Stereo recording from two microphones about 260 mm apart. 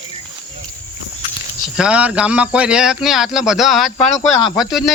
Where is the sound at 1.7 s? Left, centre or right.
Centre.